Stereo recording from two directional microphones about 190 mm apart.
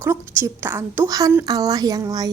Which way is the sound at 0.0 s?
15° right (ahead or behind).